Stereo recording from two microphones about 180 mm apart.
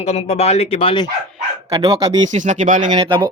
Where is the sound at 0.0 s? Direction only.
35° left (ahead or behind).